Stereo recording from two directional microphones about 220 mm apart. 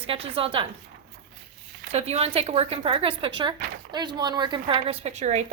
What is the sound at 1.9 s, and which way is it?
Speech, 30° right (ahead or behind).